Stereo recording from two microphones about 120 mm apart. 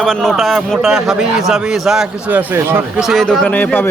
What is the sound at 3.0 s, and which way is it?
Speech, centre (ahead or behind).